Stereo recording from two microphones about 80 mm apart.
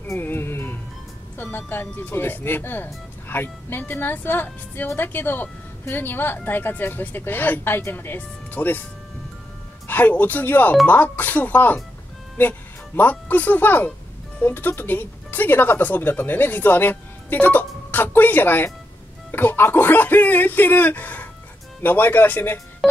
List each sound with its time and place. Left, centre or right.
0.1 s music: left
1.4 s speech: left
9.8 s speech: left